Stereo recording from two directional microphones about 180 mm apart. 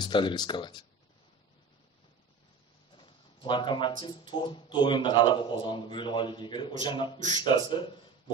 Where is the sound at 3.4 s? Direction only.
25° left (ahead or behind).